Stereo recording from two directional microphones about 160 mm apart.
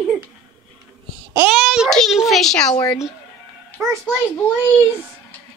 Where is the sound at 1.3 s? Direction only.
10° right (ahead or behind).